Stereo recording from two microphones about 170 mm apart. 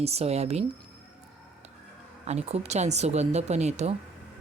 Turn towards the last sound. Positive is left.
turn(degrees=-40)  # may be behind; listen again after turning